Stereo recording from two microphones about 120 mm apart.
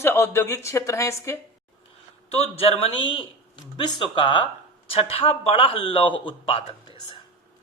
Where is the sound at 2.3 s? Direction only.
60° left (ahead or behind).